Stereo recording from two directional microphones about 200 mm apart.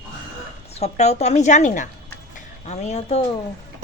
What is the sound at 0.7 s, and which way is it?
Speech, 30° left (ahead or behind).